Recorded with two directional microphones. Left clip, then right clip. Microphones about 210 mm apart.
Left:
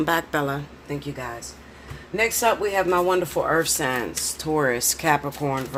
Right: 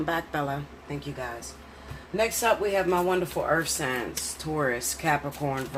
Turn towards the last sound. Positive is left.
turn(degrees=45)  # may be behind; listen again after turning